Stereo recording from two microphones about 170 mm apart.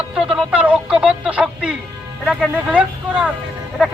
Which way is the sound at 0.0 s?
5° right (ahead or behind).